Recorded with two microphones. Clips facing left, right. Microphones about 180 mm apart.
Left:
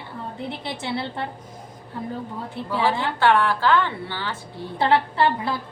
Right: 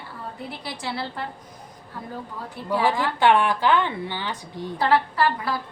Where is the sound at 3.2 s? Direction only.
15° right (ahead or behind).